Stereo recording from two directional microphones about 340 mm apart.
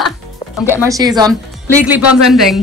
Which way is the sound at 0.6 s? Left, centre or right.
Centre.